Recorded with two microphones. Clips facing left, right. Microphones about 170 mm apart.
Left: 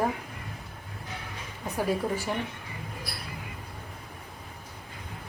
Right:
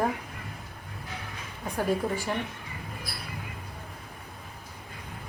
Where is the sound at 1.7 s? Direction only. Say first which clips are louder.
Even; 5° left (ahead or behind).